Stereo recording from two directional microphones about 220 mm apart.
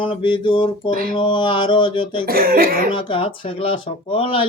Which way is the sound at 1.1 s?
20° left (ahead or behind).